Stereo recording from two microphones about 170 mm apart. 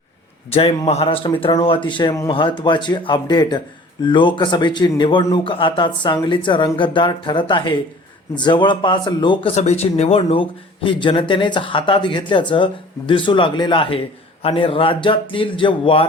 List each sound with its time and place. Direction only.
0.5 s speech: 35° left (ahead or behind)